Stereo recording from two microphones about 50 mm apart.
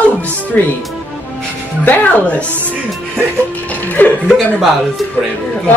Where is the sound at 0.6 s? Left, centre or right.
Left.